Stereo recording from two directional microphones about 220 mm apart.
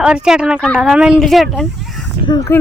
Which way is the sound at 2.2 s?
15° left (ahead or behind).